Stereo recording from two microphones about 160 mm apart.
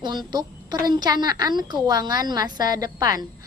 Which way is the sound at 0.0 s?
25° right (ahead or behind).